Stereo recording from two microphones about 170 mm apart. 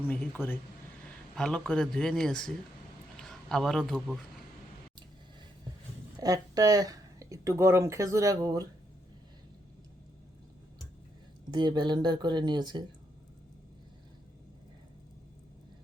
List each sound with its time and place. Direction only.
0.1 s a man's voice: 10° left (ahead or behind)
6.1 s speech: 20° right (ahead or behind)
11.5 s speech: 25° right (ahead or behind)